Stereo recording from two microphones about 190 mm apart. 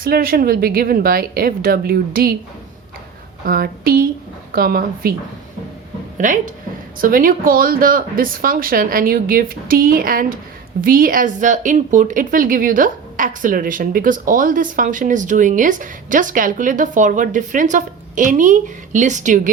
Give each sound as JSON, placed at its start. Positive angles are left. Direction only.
{"t": 0.0, "sound": "a woman's voice", "side_deg": -50}
{"t": 3.4, "sound": "a woman's voice", "side_deg": -50}
{"t": 6.1, "sound": "a woman's voice", "side_deg": -45}